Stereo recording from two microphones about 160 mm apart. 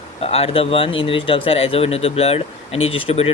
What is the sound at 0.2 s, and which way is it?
Speech, 40° left (ahead or behind).